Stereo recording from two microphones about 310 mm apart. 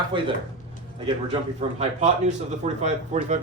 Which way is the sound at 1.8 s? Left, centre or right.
Right.